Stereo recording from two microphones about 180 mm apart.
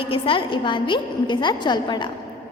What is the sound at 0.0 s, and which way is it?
A woman's voice, 30° left (ahead or behind).